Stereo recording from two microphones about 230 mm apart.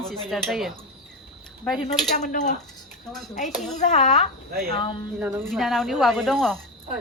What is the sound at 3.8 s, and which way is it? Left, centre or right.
Speech, left.